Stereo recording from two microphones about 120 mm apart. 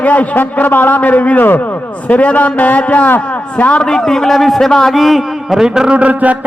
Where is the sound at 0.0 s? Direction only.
10° left (ahead or behind).